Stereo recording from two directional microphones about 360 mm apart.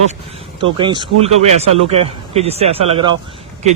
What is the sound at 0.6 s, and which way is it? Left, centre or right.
Speech, centre.